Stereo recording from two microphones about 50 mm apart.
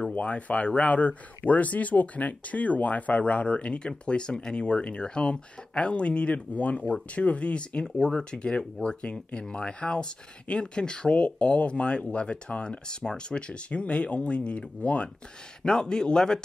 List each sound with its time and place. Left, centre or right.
0.1 s speech: left